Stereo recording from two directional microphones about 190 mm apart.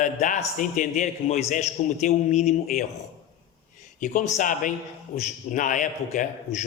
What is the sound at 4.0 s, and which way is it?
A man's voice, 45° left (ahead or behind).